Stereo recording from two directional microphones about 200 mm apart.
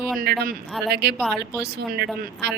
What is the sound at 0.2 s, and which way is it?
Speech, 50° right (ahead or behind).